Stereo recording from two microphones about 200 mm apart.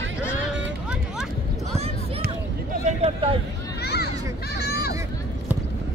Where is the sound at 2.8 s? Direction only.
35° right (ahead or behind).